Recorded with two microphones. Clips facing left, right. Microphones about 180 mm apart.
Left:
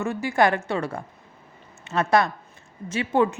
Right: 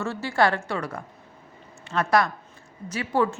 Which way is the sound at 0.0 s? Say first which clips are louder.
Left 2 dB; 15° left (ahead or behind).